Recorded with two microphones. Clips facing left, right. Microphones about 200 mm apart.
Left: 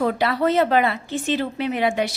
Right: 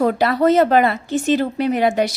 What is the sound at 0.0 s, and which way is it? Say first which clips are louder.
Speech: right 4 dB; 45° right (ahead or behind).